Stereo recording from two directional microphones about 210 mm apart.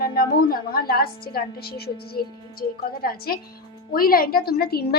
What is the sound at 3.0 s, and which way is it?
A woman's voice, 45° left (ahead or behind).